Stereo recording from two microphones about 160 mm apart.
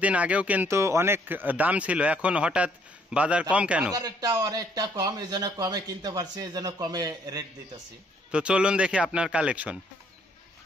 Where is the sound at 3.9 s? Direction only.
25° right (ahead or behind).